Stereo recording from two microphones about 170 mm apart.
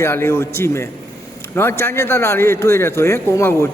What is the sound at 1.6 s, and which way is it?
A man's voice, 15° left (ahead or behind).